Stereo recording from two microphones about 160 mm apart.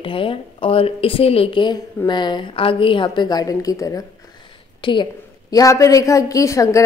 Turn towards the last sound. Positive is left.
turn(degrees=20)  # may be behind; listen again after turning